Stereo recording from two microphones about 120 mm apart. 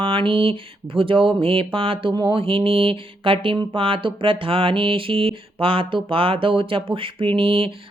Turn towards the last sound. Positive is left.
turn(degrees=-50)  # may be behind; listen again after turning